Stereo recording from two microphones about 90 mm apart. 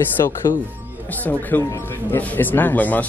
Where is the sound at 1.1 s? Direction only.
20° left (ahead or behind).